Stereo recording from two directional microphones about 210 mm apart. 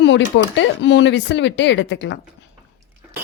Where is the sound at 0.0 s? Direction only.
60° left (ahead or behind).